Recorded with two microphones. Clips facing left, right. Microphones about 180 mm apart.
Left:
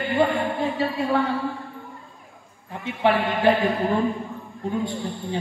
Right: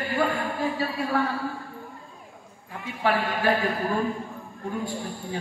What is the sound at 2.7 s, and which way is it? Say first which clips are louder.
A man's voice: left 4 dB; 25° left (ahead or behind).